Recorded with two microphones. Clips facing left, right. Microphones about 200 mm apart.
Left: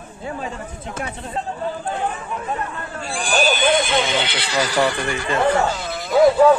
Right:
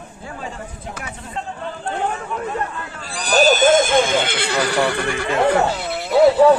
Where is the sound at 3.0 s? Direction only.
40° right (ahead or behind); by 5.2 s 65° right (ahead or behind).